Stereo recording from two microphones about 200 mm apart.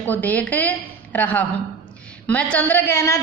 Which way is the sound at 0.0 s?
10° left (ahead or behind).